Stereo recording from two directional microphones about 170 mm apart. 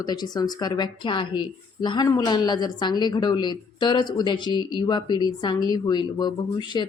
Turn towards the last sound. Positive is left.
turn(degrees=25)  # may be behind; listen again after turning